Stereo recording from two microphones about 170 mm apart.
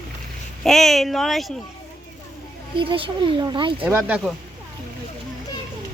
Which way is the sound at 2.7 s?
30° right (ahead or behind).